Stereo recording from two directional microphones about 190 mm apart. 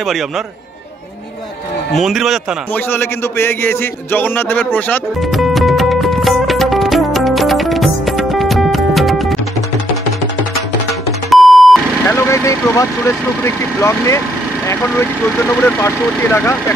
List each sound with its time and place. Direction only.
2.0 s a man's voice: centre (ahead or behind)
2.7 s a sound: 10° left (ahead or behind)
11.2 s music: centre (ahead or behind)
12.1 s speech: 15° left (ahead or behind)